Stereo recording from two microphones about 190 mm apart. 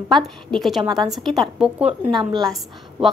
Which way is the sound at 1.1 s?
Centre (ahead or behind).